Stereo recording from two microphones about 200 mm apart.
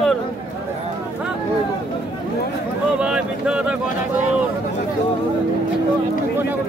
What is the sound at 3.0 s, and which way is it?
Speech, 5° right (ahead or behind).